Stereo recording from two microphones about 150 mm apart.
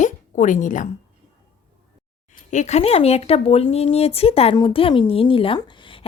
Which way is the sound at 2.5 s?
50° left (ahead or behind).